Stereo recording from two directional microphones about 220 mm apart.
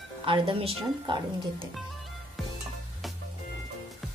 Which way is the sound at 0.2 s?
25° right (ahead or behind).